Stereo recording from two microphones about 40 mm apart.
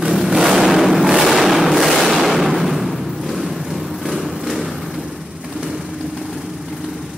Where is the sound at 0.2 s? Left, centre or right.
Centre.